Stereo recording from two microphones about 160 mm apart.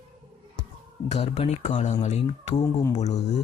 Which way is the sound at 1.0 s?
45° left (ahead or behind).